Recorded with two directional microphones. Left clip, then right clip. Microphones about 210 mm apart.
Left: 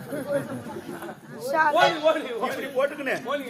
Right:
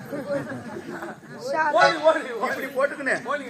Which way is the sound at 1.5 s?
45° left (ahead or behind).